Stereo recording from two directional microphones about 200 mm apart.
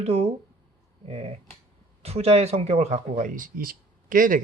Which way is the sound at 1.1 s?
30° right (ahead or behind).